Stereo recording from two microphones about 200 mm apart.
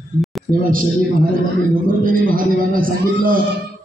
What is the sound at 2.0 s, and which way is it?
A man's voice, 45° right (ahead or behind).